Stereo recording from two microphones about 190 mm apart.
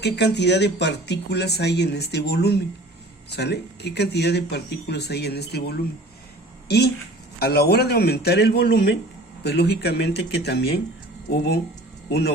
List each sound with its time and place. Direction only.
0.0 s speech: 65° left (ahead or behind)